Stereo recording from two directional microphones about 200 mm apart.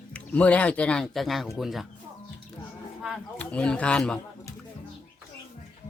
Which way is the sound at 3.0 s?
5° left (ahead or behind).